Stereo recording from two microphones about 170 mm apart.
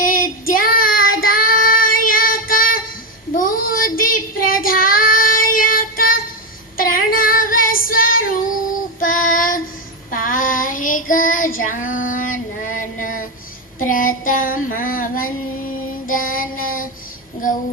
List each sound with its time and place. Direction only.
0.0 s child singing: 55° left (ahead or behind)
17.4 s music: 50° left (ahead or behind)